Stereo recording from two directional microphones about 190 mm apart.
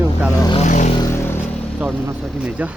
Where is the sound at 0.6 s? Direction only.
40° left (ahead or behind).